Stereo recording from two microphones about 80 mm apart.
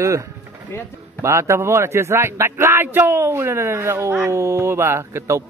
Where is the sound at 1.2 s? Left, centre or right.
Right.